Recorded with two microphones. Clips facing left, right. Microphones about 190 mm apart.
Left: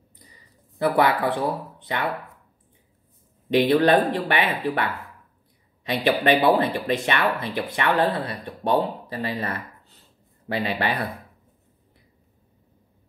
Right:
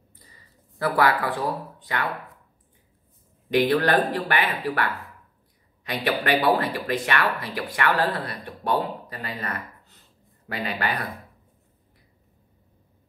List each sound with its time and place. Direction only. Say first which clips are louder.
0.2 s speech: left 3 dB; 15° left (ahead or behind)
3.4 s speech: left 3 dB; 25° left (ahead or behind)